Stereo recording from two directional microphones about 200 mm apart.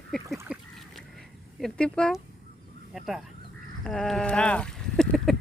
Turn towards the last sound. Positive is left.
turn(degrees=0)  # may be behind; listen again after turning